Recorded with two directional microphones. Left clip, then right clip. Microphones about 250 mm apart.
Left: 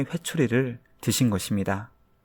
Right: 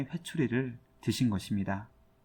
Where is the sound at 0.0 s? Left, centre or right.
Left.